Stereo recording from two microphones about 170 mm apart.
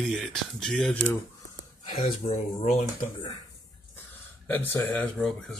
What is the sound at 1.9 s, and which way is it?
Speech, 40° left (ahead or behind).